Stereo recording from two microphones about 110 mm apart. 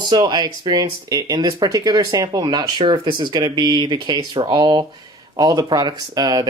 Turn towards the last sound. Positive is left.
turn(degrees=-35)  # may be behind; listen again after turning